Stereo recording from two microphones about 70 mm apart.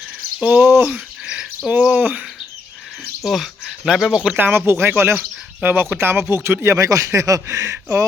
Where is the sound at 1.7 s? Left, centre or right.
Right.